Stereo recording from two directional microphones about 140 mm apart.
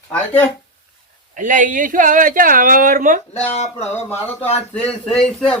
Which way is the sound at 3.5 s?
50° left (ahead or behind).